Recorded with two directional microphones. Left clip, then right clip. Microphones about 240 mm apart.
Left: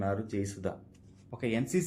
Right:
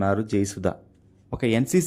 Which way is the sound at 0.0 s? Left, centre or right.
Right.